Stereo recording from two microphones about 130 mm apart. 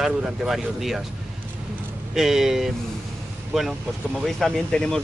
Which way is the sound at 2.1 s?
5° right (ahead or behind).